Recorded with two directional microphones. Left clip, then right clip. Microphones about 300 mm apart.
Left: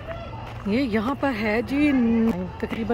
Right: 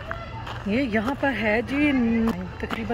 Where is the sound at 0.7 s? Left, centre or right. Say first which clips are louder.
Left 1 dB; centre.